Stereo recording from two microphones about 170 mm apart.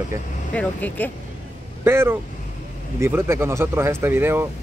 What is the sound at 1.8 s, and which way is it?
Speech, 15° right (ahead or behind).